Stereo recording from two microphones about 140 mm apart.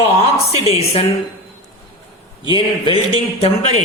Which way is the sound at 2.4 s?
35° left (ahead or behind).